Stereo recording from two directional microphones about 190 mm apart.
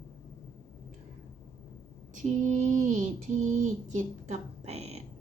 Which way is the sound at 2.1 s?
40° right (ahead or behind).